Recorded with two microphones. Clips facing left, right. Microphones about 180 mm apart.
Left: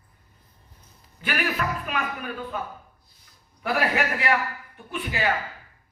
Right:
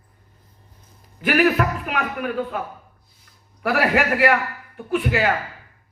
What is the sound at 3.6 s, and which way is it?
Speech, 60° right (ahead or behind).